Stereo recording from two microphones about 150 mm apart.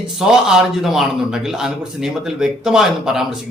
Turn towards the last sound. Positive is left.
turn(degrees=-5)  # may be behind; listen again after turning